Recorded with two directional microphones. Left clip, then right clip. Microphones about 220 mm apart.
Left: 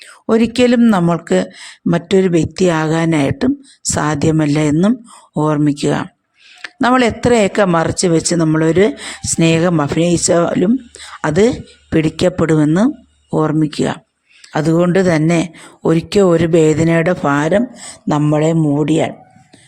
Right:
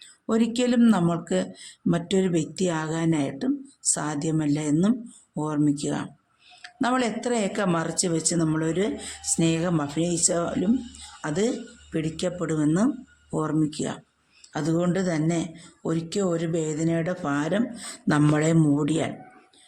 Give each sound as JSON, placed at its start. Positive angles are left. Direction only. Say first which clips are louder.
{"t": 0.0, "sound": "speech", "louder": "left 11 dB", "side_deg": 35}
{"t": 18.8, "sound": "speech", "louder": "left 11 dB", "side_deg": 30}